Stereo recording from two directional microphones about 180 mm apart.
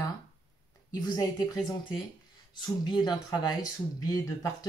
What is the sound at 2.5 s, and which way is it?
Speech, 25° left (ahead or behind).